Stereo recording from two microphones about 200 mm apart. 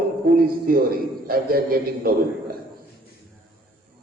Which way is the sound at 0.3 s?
50° right (ahead or behind).